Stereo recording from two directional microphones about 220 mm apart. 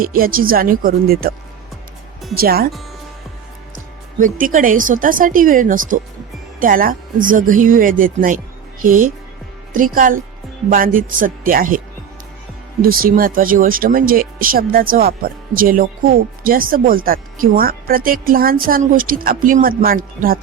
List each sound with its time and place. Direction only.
0.0 s speech: 40° right (ahead or behind)
2.3 s speech: 45° right (ahead or behind)
4.2 s speech: 40° right (ahead or behind)
12.8 s speech: 40° right (ahead or behind)